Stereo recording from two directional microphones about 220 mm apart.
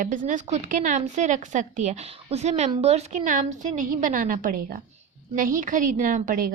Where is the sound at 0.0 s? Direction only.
35° right (ahead or behind).